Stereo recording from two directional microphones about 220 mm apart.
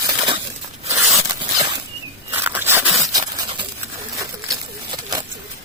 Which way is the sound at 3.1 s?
20° right (ahead or behind).